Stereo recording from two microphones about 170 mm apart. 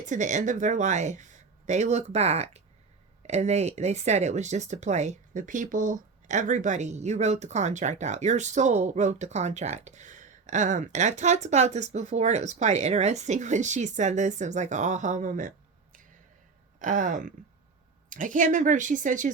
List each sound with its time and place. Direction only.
0.0 s speech: 45° right (ahead or behind)